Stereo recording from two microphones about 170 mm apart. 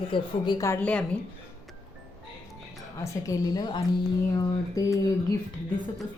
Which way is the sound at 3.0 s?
20° left (ahead or behind).